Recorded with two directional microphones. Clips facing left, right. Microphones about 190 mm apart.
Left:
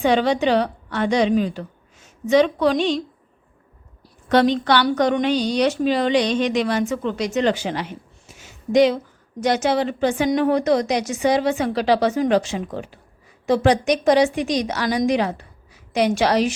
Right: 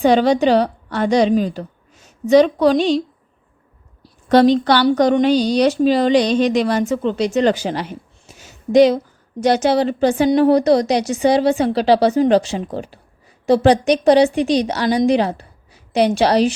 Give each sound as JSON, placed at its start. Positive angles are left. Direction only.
{"t": 0.0, "sound": "a woman's voice", "side_deg": -40}
{"t": 4.3, "sound": "a woman's voice", "side_deg": -35}
{"t": 8.3, "sound": "a sound", "side_deg": -35}
{"t": 9.4, "sound": "a woman's voice", "side_deg": -35}